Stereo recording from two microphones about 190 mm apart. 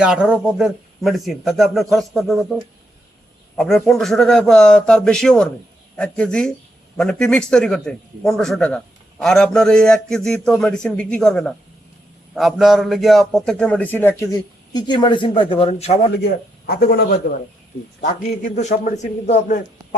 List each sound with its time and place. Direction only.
0.0 s a man's voice: 5° right (ahead or behind)
3.6 s a man's voice: centre (ahead or behind); by 16.0 s 30° left (ahead or behind)
16.2 s speech: 55° left (ahead or behind)
18.0 s a man's voice: 40° left (ahead or behind)